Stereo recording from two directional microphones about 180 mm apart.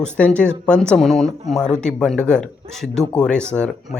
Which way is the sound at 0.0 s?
5° left (ahead or behind).